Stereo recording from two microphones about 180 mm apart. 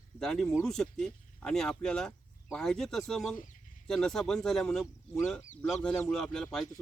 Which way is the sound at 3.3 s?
45° left (ahead or behind).